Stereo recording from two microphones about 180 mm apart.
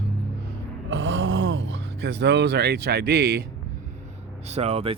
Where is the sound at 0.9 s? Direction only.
90° right; by 3.4 s 65° right (ahead or behind).